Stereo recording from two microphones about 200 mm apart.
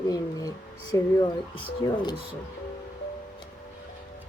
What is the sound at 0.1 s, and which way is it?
Speech, 20° left (ahead or behind).